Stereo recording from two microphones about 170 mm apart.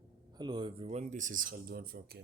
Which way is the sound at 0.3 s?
25° right (ahead or behind).